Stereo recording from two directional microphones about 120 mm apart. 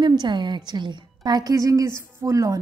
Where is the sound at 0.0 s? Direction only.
40° right (ahead or behind).